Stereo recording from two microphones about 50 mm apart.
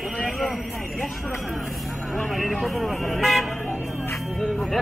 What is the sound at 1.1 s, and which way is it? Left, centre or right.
Vehicle, centre.